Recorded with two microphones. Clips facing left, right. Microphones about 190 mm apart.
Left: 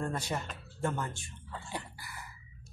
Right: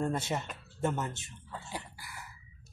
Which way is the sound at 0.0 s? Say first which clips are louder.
Right 3 dB; 25° right (ahead or behind).